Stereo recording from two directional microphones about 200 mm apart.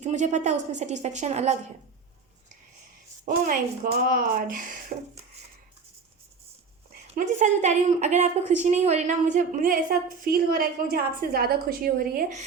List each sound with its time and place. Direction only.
0.0 s a woman's voice: 35° right (ahead or behind)
3.2 s a woman's voice: 40° right (ahead or behind)
7.1 s a woman's voice: 35° right (ahead or behind)